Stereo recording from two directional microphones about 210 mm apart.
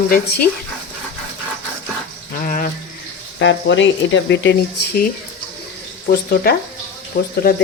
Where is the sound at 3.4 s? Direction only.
60° left (ahead or behind).